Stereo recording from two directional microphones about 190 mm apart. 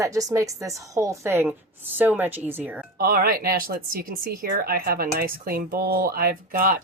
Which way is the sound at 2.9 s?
50° right (ahead or behind).